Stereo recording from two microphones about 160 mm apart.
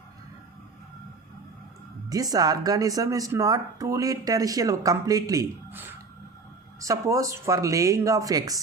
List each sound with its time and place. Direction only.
2.0 s speech: 25° right (ahead or behind)